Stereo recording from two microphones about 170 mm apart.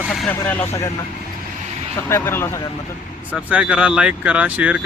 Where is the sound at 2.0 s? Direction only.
15° left (ahead or behind).